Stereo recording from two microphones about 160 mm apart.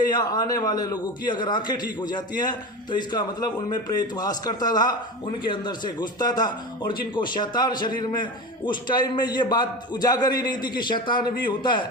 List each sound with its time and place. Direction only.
0.1 s a man's voice: 25° left (ahead or behind)